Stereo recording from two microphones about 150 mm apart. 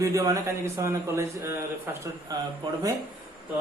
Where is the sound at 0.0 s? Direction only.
20° right (ahead or behind).